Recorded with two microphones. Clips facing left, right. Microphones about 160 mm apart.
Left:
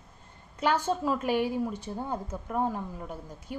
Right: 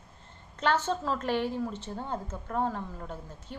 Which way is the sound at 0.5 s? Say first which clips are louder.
Left 1 dB; 10° left (ahead or behind).